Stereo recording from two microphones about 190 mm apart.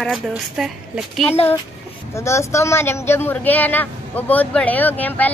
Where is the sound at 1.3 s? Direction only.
30° left (ahead or behind).